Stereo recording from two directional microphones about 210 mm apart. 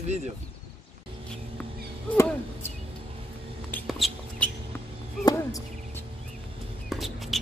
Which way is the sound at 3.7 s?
Centre (ahead or behind).